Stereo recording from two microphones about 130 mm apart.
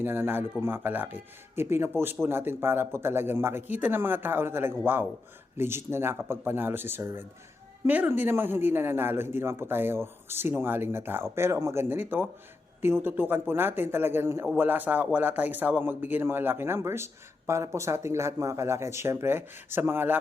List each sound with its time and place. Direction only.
0.0 s a man's voice: 15° right (ahead or behind)